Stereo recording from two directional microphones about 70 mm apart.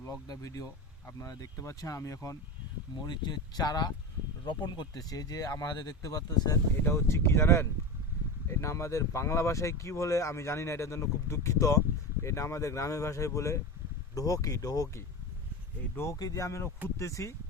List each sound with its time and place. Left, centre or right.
0.0 s speech: left
3.0 s speech: left
4.4 s speech: left
5.6 s speech: left
6.0 s speech: left
6.8 s speech: left
16.1 s speech: left